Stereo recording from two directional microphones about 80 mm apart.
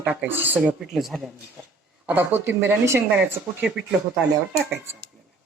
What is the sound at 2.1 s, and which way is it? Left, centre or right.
Speech, right.